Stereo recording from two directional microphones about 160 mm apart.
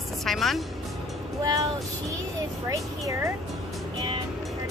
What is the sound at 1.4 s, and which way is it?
Child singing, 25° right (ahead or behind).